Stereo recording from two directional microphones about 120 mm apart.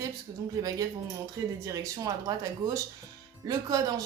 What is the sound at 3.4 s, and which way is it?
Speech, 30° right (ahead or behind).